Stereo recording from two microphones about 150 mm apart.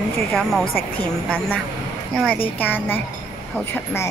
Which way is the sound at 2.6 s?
15° left (ahead or behind).